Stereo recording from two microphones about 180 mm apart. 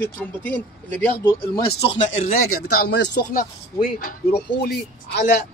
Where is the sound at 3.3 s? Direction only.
50° left (ahead or behind).